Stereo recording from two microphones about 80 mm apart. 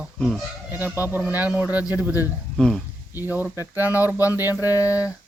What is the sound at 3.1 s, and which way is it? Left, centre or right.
Speech, right.